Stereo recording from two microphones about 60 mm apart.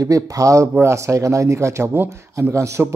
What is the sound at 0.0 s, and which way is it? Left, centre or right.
Speech, right.